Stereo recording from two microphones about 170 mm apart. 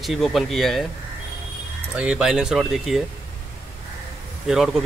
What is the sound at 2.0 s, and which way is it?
Speech, 5° right (ahead or behind).